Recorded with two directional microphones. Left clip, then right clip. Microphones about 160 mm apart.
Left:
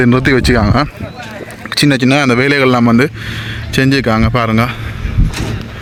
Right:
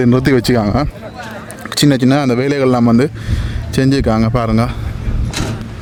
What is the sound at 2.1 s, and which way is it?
A man's voice, centre (ahead or behind).